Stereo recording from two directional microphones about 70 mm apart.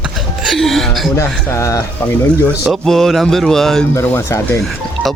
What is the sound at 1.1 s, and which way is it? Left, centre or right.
Speech, left.